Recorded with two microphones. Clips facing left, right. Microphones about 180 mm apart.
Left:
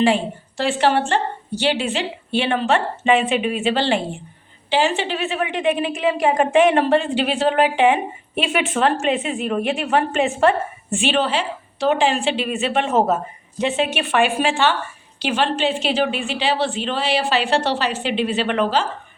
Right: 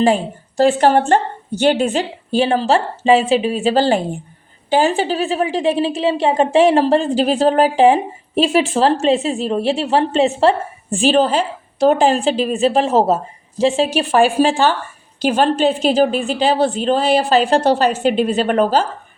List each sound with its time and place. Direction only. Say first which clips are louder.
0.0 s a woman's voice: right 3 dB; 40° right (ahead or behind)